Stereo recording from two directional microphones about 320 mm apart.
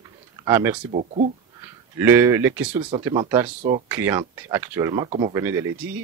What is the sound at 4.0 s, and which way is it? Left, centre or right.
Speech, centre.